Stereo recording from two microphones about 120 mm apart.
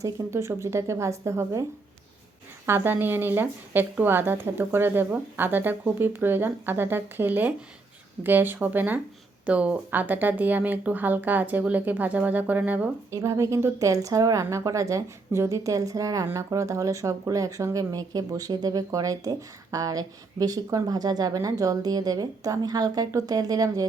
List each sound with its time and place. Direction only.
0.0 s a woman's voice: 25° right (ahead or behind)
2.6 s a woman's voice: 20° right (ahead or behind)
13.1 s a woman's voice: 25° right (ahead or behind)